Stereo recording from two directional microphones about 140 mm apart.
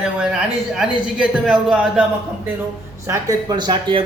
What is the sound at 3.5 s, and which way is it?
Speech, 30° right (ahead or behind).